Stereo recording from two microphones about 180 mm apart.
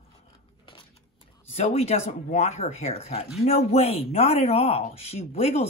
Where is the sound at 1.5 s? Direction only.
35° left (ahead or behind).